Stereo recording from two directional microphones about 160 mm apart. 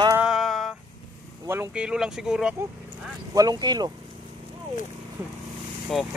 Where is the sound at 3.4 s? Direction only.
25° right (ahead or behind).